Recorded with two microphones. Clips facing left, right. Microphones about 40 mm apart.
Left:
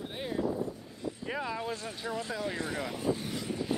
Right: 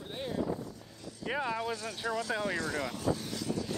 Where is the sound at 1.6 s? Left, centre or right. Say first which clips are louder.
Right 1 dB; centre.